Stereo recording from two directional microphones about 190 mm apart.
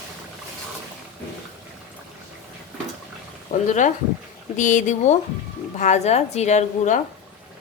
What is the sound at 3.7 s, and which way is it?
A woman's voice, 40° left (ahead or behind).